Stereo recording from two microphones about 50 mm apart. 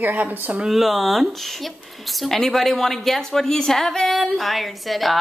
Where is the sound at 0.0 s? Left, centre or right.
Right.